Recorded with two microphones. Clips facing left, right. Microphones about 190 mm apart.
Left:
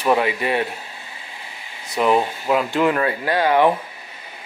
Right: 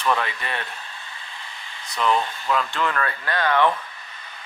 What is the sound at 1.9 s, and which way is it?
Speech, 10° left (ahead or behind).